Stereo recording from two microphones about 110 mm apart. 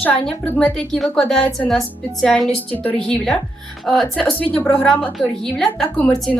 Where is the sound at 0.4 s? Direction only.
10° left (ahead or behind).